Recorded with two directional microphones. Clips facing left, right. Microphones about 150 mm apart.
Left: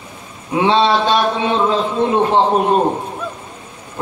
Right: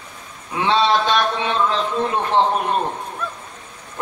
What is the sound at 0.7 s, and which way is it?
A man's voice, 20° left (ahead or behind).